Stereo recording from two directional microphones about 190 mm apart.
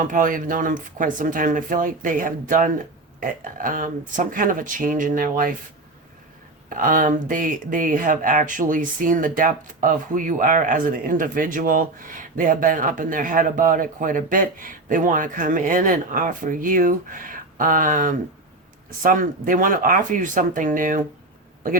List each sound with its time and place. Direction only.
0.0 s speech: 45° right (ahead or behind)
6.7 s speech: 45° right (ahead or behind)